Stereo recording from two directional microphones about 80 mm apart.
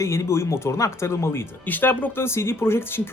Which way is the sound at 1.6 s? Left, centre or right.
Left.